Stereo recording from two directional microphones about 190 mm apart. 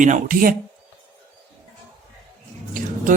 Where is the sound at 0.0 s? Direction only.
45° right (ahead or behind).